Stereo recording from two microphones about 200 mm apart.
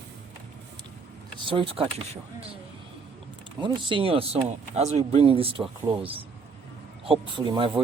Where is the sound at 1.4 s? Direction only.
25° right (ahead or behind).